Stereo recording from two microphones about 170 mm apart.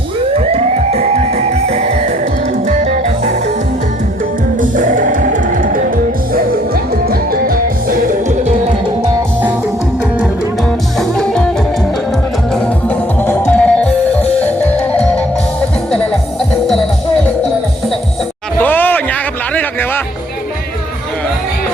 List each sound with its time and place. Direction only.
0.3 s music: 35° right (ahead or behind)
4.6 s music: 50° right (ahead or behind)
7.1 s music: 60° right (ahead or behind); by 8.7 s 45° right (ahead or behind)
11.2 s music: 5° left (ahead or behind)
12.9 s music: 15° left (ahead or behind)
18.6 s a sound: 10° left (ahead or behind)